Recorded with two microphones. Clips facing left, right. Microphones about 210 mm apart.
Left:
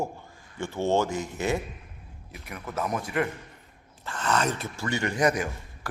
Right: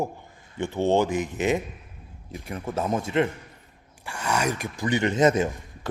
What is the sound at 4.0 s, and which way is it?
Speech, 10° right (ahead or behind).